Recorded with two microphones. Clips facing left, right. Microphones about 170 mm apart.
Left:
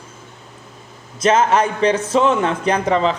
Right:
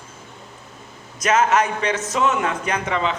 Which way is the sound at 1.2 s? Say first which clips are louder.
Left 3 dB; 30° left (ahead or behind).